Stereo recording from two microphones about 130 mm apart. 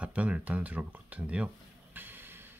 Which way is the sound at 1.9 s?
15° right (ahead or behind).